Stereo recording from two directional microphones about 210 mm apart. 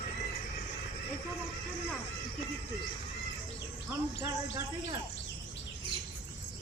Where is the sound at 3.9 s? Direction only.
10° right (ahead or behind).